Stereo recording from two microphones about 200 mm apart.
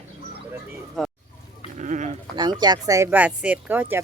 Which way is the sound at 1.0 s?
Centre (ahead or behind).